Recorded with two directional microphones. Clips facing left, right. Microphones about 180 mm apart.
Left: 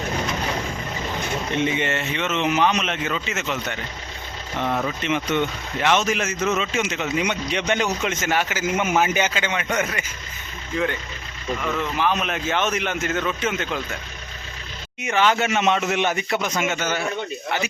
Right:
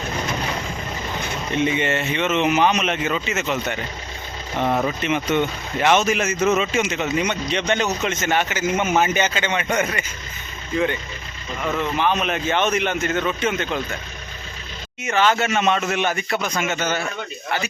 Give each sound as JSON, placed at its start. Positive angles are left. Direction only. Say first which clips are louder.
{"t": 1.8, "sound": "speech", "louder": "right 3 dB", "side_deg": -5}
{"t": 4.6, "sound": "speech", "louder": "right 3 dB", "side_deg": -25}
{"t": 5.0, "sound": "speech", "louder": "even", "side_deg": -5}
{"t": 7.3, "sound": "a man's voice", "louder": "right 1 dB", "side_deg": 10}
{"t": 11.9, "sound": "speech", "louder": "right 2 dB", "side_deg": 0}
{"t": 15.0, "sound": "a man's voice", "louder": "right 1 dB", "side_deg": 15}